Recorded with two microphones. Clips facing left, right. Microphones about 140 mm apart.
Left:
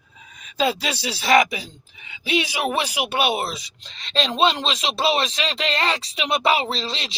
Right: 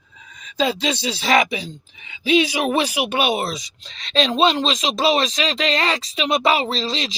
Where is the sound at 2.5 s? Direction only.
15° right (ahead or behind).